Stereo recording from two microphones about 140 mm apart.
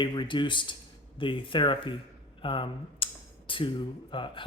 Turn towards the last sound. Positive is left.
turn(degrees=35)  # may be behind; listen again after turning